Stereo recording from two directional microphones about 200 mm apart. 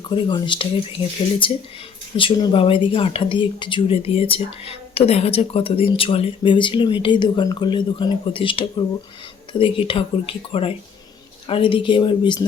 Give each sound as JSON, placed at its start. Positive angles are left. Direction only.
{"t": 0.1, "sound": "speech", "side_deg": 25}